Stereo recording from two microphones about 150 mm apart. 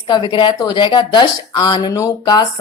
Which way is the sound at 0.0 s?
35° left (ahead or behind).